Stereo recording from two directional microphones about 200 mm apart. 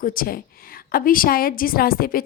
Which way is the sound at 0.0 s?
45° left (ahead or behind).